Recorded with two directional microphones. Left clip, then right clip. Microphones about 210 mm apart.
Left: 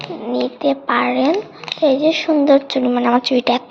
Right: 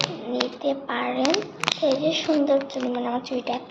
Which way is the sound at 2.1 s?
35° left (ahead or behind).